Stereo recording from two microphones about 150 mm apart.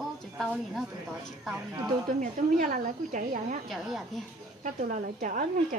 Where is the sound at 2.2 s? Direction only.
55° right (ahead or behind).